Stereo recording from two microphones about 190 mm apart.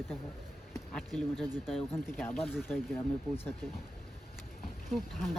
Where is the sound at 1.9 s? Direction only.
10° left (ahead or behind).